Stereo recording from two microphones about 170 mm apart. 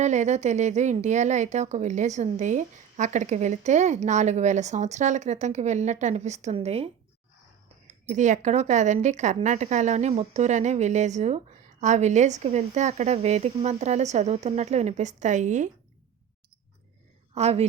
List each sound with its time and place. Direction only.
0.0 s speech: 45° right (ahead or behind)
17.3 s a woman's voice: 40° right (ahead or behind)